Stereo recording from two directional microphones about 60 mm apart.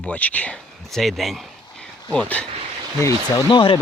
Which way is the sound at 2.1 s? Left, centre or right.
Left.